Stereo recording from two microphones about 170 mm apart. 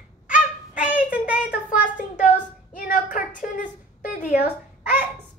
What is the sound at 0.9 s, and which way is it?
Child singing, 10° right (ahead or behind).